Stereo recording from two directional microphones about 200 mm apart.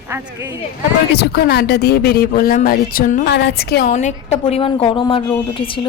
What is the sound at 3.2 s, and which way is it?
Speech, 55° left (ahead or behind).